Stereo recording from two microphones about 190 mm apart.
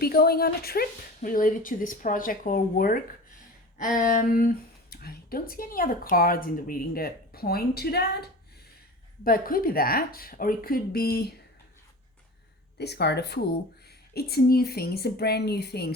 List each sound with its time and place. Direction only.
0.0 s speech: 55° left (ahead or behind)
12.8 s speech: 60° left (ahead or behind)